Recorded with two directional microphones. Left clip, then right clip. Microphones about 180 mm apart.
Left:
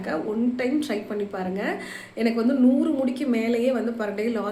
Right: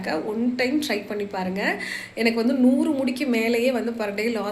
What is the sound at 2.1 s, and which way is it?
A woman's voice, 15° left (ahead or behind).